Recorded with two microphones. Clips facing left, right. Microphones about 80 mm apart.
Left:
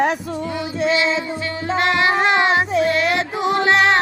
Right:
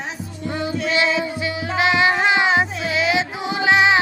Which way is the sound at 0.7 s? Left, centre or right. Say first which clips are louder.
Left 2 dB; left.